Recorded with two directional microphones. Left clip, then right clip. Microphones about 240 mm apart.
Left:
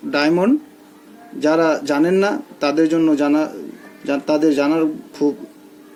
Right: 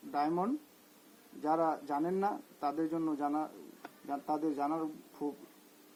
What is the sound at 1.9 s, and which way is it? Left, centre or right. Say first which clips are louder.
Speech: left 17 dB; centre.